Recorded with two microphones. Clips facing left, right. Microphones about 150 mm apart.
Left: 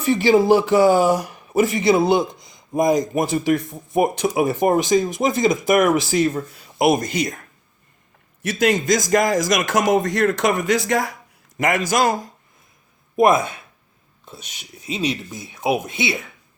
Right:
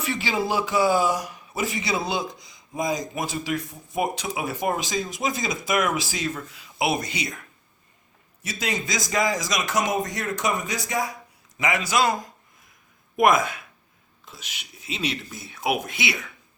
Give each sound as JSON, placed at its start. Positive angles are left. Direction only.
{"t": 0.2, "sound": "speech", "side_deg": 50}
{"t": 8.5, "sound": "speech", "side_deg": 50}
{"t": 9.9, "sound": "speech", "side_deg": 70}
{"t": 11.5, "sound": "speech", "side_deg": 50}
{"t": 13.1, "sound": "speech", "side_deg": 30}
{"t": 14.8, "sound": "speech", "side_deg": 40}
{"t": 15.4, "sound": "speech", "side_deg": 20}